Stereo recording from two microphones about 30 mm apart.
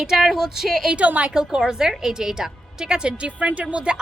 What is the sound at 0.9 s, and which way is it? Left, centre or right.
Speech, right.